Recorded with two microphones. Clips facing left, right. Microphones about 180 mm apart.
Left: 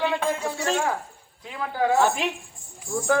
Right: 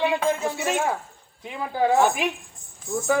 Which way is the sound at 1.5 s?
15° right (ahead or behind).